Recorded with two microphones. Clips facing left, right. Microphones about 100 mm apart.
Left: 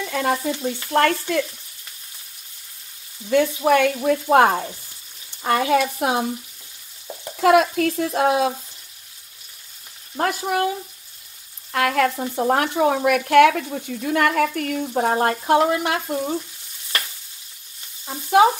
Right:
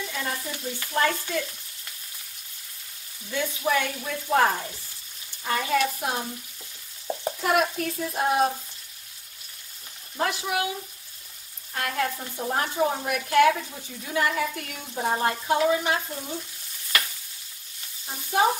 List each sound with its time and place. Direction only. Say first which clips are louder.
0.1 s stir: left 13 dB; 70° left (ahead or behind)
0.9 s speech: left 6 dB; 65° left (ahead or behind)
3.3 s speech: left 10 dB; 60° left (ahead or behind)
5.4 s speech: left 6 dB; 80° left
7.4 s speech: left 9 dB; 90° left
10.1 s frying: left 5 dB; 45° left (ahead or behind)
11.7 s speech: left 9 dB; 75° left (ahead or behind)
18.0 s stir: left 8 dB; 90° left